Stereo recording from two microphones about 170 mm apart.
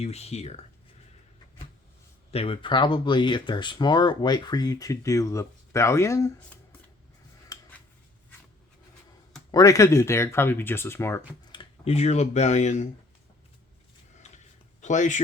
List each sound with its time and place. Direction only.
0.0 s speech: 40° left (ahead or behind)
2.3 s speech: 35° left (ahead or behind); by 6.6 s 15° left (ahead or behind)
7.5 s a sound: 20° left (ahead or behind)
9.5 s speech: 20° left (ahead or behind)
11.5 s speech: 40° left (ahead or behind)
14.2 s a sound: 45° left (ahead or behind)